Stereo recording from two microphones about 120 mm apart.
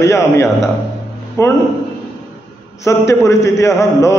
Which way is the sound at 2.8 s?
25° left (ahead or behind).